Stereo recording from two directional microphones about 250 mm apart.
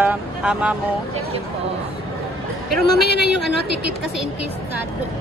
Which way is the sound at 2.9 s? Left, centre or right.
Left.